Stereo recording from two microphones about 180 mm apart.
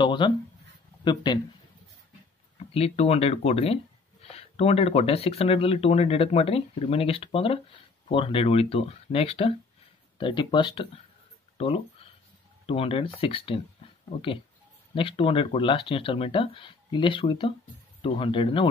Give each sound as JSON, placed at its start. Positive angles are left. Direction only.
{"t": 0.0, "sound": "writing", "side_deg": 25}
{"t": 1.0, "sound": "speech", "side_deg": 25}
{"t": 2.7, "sound": "speech", "side_deg": 35}
{"t": 11.5, "sound": "a sound", "side_deg": 30}
{"t": 12.6, "sound": "speech", "side_deg": 30}